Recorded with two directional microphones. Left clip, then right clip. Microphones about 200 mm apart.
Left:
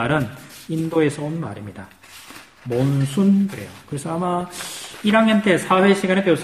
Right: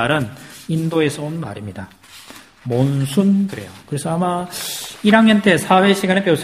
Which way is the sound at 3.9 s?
45° right (ahead or behind).